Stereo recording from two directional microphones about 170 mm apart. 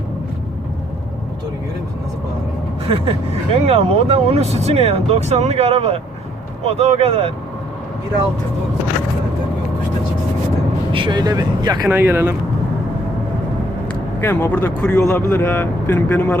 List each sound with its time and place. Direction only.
2.8 s speech: 35° right (ahead or behind)
10.9 s speech: 25° right (ahead or behind)
14.2 s a man's voice: 15° left (ahead or behind)